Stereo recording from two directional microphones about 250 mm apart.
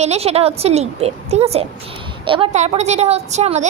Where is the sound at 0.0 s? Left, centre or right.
Right.